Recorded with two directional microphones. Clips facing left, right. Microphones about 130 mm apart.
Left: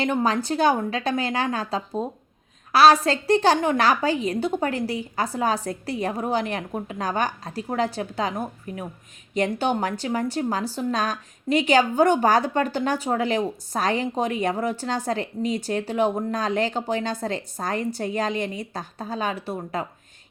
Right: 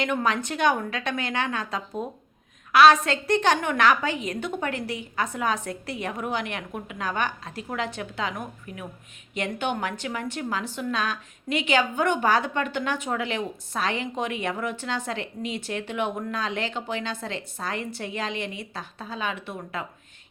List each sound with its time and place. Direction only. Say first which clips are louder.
0.0 s a woman's voice: left 3 dB; 30° left (ahead or behind)